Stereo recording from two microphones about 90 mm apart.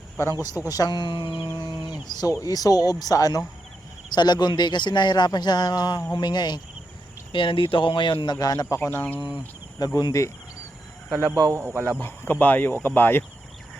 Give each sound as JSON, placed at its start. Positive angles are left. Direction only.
{"t": 0.7, "sound": "speech", "side_deg": 45}
{"t": 1.5, "sound": "livestock", "side_deg": 55}
{"t": 2.4, "sound": "speech", "side_deg": 45}
{"t": 4.1, "sound": "speech", "side_deg": 55}
{"t": 7.3, "sound": "speech", "side_deg": 70}
{"t": 8.4, "sound": "speech", "side_deg": 45}
{"t": 8.8, "sound": "speech", "side_deg": 25}
{"t": 9.7, "sound": "speech", "side_deg": 45}
{"t": 11.3, "sound": "speech", "side_deg": -40}
{"t": 11.6, "sound": "speech", "side_deg": -30}
{"t": 11.9, "sound": "speech", "side_deg": 20}